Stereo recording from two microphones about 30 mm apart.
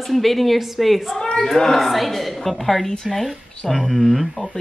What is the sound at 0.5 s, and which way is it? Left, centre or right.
A woman's voice, centre.